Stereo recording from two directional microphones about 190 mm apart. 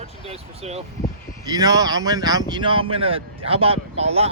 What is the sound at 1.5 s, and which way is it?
Speech, 20° right (ahead or behind).